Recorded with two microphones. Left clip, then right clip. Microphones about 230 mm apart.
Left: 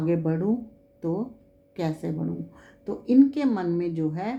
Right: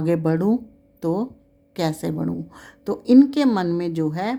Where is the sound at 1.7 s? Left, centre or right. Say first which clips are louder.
Right 6 dB; right.